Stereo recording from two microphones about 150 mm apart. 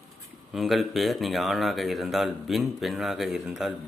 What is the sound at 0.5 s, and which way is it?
Speech, centre (ahead or behind).